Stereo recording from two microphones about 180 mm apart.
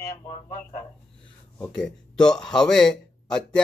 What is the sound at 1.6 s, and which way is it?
Speech, 5° left (ahead or behind).